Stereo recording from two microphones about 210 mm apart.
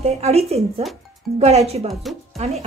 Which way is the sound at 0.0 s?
30° right (ahead or behind).